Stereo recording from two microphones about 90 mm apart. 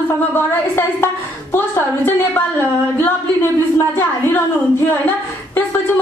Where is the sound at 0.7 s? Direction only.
25° left (ahead or behind).